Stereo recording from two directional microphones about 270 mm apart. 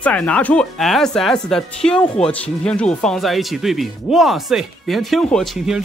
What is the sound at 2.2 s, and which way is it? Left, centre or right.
Speech, left.